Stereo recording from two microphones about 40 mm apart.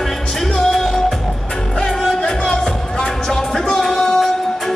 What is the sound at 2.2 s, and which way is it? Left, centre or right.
Music, left.